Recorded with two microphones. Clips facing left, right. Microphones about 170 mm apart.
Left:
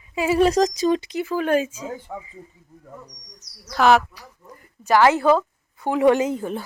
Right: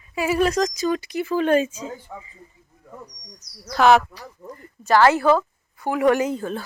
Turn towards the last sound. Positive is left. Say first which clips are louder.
# left 1 dB
turn(degrees=20)  # may be behind; listen again after turning